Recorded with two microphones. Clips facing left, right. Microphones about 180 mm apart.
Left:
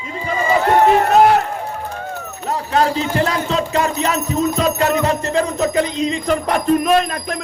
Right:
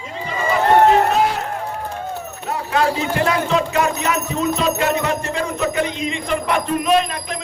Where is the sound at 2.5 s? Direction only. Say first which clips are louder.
Left 2 dB; 35° left (ahead or behind).